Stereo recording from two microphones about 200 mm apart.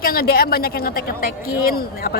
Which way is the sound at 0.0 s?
50° left (ahead or behind).